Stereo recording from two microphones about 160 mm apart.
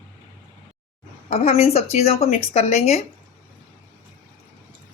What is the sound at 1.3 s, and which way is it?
Speech, 45° left (ahead or behind).